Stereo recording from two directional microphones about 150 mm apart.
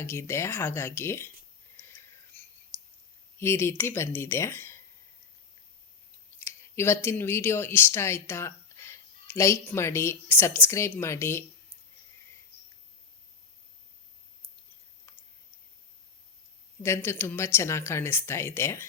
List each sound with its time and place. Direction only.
0.0 s speech: 15° left (ahead or behind)
1.7 s a sound: 15° left (ahead or behind)
3.3 s speech: 15° left (ahead or behind)
6.4 s speech: 15° left (ahead or behind)
16.8 s speech: 15° left (ahead or behind)